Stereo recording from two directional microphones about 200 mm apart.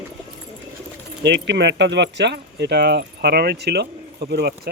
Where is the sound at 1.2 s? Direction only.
60° right (ahead or behind).